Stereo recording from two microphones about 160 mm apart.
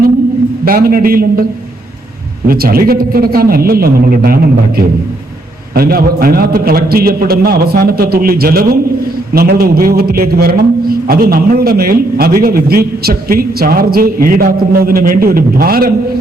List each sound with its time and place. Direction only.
0.6 s a man's voice: 65° right (ahead or behind)
2.5 s a man's voice: 65° right (ahead or behind)
5.7 s a man's voice: 70° right (ahead or behind)